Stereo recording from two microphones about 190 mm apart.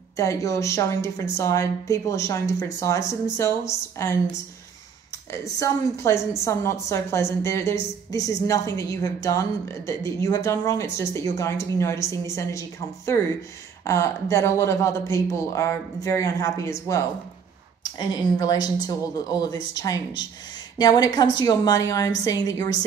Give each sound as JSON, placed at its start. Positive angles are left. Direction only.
{"t": 0.2, "sound": "a woman's voice", "side_deg": 15}
{"t": 5.3, "sound": "a woman's voice", "side_deg": 15}
{"t": 17.9, "sound": "speech", "side_deg": 20}